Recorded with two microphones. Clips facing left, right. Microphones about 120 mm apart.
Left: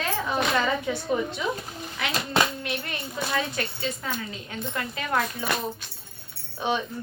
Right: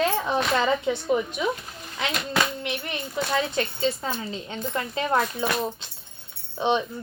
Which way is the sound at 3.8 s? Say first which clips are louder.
Right 4 dB; 30° right (ahead or behind).